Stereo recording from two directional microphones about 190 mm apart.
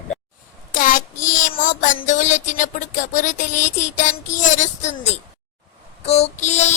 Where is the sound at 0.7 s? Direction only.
45° left (ahead or behind).